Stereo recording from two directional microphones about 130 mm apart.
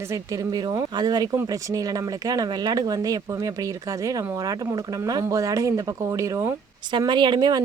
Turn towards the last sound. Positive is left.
turn(degrees=-35)  # may be behind; listen again after turning